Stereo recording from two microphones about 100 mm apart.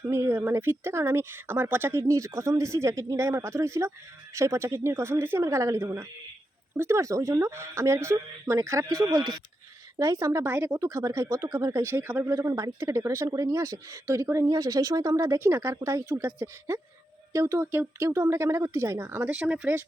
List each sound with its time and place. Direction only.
0.0 s speech: 25° right (ahead or behind)